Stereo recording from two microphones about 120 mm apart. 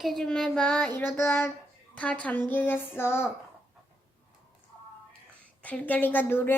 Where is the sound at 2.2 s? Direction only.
15° left (ahead or behind).